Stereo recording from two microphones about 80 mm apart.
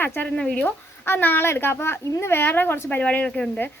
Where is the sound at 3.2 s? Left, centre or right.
Centre.